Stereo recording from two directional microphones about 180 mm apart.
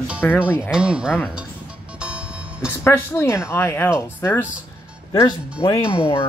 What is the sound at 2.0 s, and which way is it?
Music, 5° right (ahead or behind).